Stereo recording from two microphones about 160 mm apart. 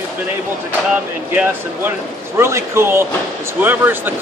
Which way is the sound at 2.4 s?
15° right (ahead or behind).